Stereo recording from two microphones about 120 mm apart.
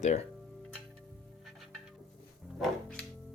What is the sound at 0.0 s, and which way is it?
Speech, 65° left (ahead or behind).